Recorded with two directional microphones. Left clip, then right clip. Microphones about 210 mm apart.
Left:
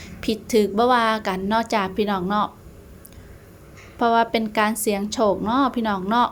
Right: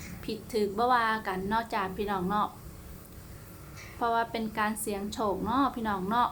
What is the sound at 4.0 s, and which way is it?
A woman's voice, 30° left (ahead or behind).